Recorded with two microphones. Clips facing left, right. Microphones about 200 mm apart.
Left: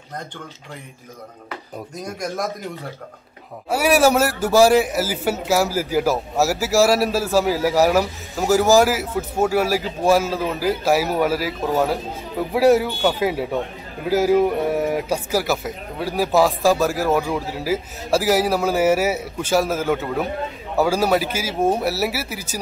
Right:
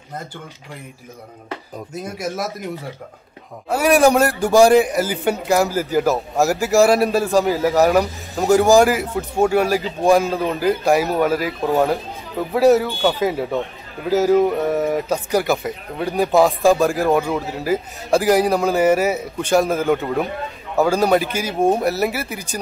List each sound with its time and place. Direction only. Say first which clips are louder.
2.0 s a man's voice: even; 5° right (ahead or behind)
3.7 s a man's voice: right 2 dB; 5° left (ahead or behind)